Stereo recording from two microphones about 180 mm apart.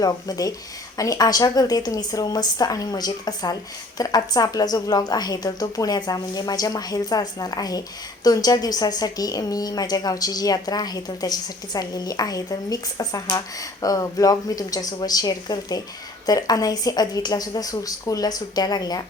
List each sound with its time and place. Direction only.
0.0 s a woman's voice: 20° left (ahead or behind)